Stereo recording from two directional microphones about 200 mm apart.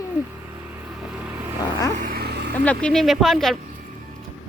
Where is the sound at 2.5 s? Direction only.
5° left (ahead or behind).